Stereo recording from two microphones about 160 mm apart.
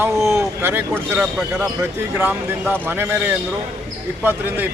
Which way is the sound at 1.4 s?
Centre (ahead or behind).